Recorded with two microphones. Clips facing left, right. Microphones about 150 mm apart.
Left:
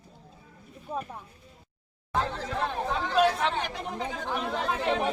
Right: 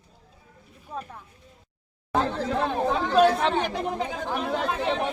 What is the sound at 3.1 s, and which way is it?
Speech, 55° right (ahead or behind).